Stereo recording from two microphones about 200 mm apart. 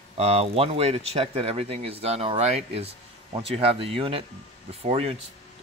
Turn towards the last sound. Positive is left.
turn(degrees=-30)  # may be behind; listen again after turning